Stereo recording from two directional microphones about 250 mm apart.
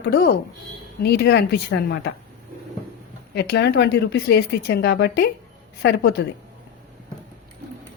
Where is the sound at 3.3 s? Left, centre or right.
Left.